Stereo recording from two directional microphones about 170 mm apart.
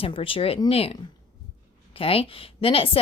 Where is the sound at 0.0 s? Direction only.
35° left (ahead or behind).